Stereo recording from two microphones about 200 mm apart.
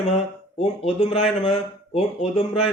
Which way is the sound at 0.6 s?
30° left (ahead or behind).